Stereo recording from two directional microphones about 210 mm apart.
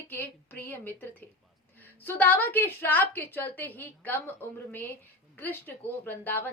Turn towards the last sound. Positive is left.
turn(degrees=10)  # may be behind; listen again after turning